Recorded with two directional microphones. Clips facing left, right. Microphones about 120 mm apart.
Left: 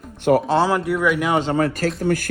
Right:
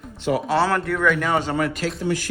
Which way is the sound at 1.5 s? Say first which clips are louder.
Left 4 dB; 35° left (ahead or behind).